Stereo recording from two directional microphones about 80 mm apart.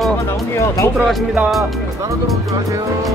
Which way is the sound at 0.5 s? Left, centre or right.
Left.